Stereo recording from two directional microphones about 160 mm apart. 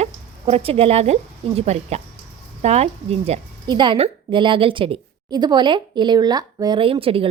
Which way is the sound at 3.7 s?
30° right (ahead or behind).